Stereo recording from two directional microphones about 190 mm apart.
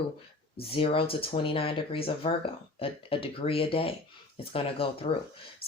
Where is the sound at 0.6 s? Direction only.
30° left (ahead or behind).